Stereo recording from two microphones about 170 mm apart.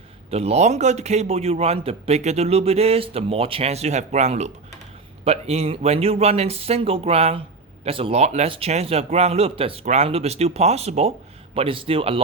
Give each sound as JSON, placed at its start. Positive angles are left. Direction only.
{"t": 0.3, "sound": "a man's voice", "side_deg": -35}